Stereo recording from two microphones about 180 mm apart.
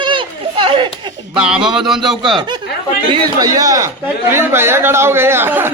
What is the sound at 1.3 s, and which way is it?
Speech, 5° right (ahead or behind).